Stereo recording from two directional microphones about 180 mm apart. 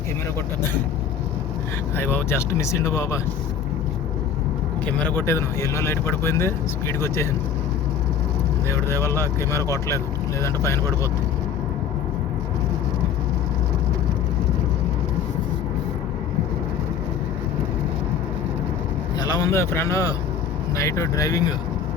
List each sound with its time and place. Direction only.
2.0 s speech: 10° left (ahead or behind)
4.9 s speech: 10° left (ahead or behind)
9.0 s speech: 15° left (ahead or behind)
19.2 s speech: 20° left (ahead or behind)